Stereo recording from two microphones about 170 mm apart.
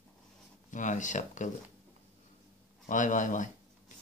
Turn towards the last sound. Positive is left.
turn(degrees=50)  # may be behind; listen again after turning